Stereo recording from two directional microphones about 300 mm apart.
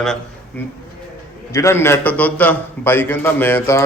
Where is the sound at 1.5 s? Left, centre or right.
Centre.